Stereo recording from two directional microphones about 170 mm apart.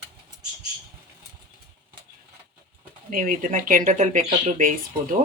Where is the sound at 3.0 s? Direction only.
50° right (ahead or behind).